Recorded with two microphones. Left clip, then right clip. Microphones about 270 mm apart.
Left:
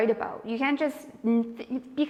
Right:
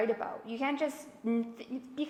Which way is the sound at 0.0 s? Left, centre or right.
Left.